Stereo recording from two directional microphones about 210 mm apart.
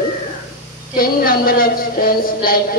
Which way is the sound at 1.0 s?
45° left (ahead or behind).